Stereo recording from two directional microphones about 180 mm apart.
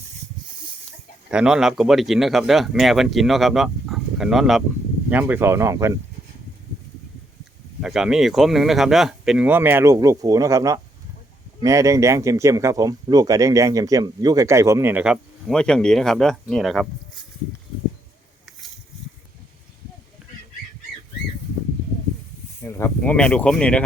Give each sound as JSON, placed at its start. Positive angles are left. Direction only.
{"t": 1.3, "sound": "speech", "side_deg": -5}
{"t": 7.8, "sound": "speech", "side_deg": -5}
{"t": 22.6, "sound": "speech", "side_deg": 15}